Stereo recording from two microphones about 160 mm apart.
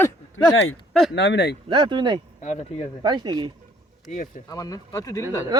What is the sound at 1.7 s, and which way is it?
Speech, 30° right (ahead or behind).